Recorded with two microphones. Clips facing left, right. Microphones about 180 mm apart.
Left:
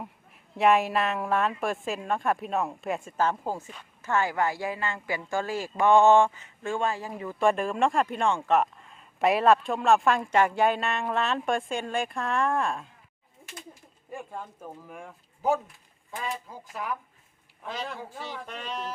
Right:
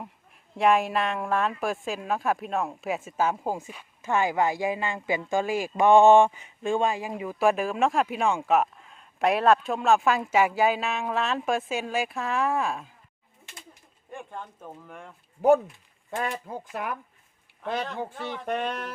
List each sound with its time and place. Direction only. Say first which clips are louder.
0.5 s a woman's voice: even; centre (ahead or behind)
14.1 s speech: left 1 dB; 5° left (ahead or behind)
15.4 s speech: right 7 dB; 60° right (ahead or behind)
18.2 s speech: right 8 dB; 60° right (ahead or behind)